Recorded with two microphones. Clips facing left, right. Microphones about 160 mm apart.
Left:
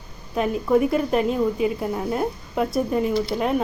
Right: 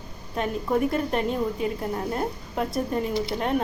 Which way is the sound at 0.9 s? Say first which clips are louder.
Left 4 dB; 5° left (ahead or behind).